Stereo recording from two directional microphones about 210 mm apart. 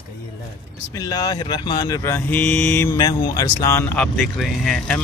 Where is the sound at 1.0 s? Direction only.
15° left (ahead or behind).